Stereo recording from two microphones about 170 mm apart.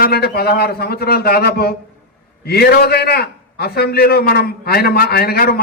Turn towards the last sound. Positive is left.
turn(degrees=65)  # may be behind; listen again after turning